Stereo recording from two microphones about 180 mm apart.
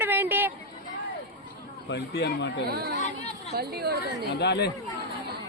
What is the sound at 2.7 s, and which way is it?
Speech, 60° right (ahead or behind).